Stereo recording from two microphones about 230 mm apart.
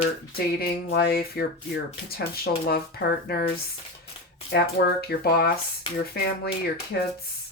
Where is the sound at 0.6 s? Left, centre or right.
Left.